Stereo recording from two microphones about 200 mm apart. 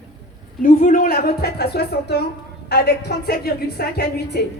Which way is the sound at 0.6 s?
45° left (ahead or behind).